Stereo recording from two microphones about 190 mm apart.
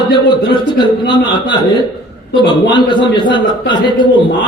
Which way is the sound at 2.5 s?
25° left (ahead or behind).